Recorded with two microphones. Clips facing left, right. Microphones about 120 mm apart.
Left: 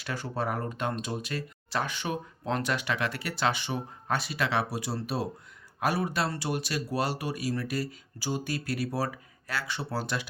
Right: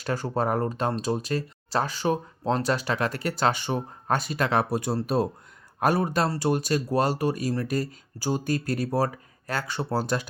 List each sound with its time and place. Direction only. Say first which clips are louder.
0.0 s speech: right 6 dB; 40° right (ahead or behind)